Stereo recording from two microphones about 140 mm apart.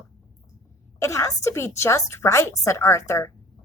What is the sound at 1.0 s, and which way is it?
A woman's voice, 20° left (ahead or behind).